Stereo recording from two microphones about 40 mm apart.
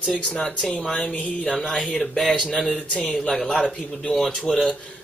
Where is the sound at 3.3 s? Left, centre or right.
Centre.